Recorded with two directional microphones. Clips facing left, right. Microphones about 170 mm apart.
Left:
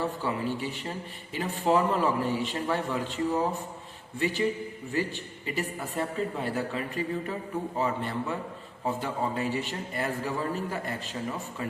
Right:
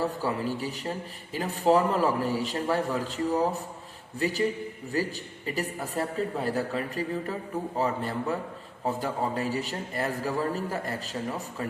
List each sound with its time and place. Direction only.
0.0 s speech: 40° right (ahead or behind)
4.2 s speech: 40° right (ahead or behind)